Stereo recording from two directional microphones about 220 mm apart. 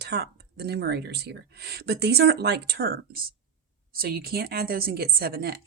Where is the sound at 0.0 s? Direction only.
50° right (ahead or behind).